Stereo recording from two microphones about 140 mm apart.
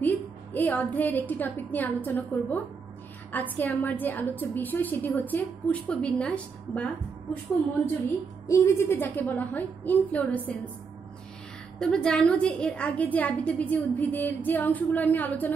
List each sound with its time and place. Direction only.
0.0 s a woman's voice: 15° left (ahead or behind)
8.5 s a woman's voice: 15° left (ahead or behind)
11.8 s a woman's voice: 5° left (ahead or behind)